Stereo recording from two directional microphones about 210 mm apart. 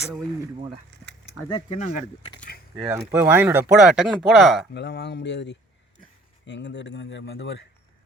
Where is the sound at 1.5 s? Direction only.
25° left (ahead or behind).